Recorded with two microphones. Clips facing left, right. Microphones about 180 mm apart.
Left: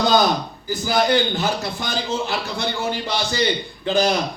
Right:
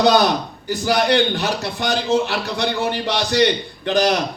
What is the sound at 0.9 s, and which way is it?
A man's voice, 65° right (ahead or behind).